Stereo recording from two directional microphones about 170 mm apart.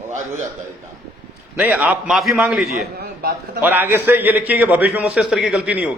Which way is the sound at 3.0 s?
70° right (ahead or behind).